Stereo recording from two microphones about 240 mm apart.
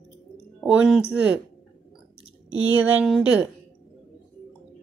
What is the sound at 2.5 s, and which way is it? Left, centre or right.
Speech, centre.